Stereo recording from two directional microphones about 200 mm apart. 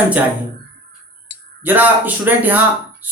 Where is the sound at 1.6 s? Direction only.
10° right (ahead or behind).